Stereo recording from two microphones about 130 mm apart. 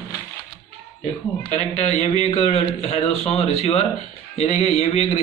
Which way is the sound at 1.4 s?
65° left (ahead or behind).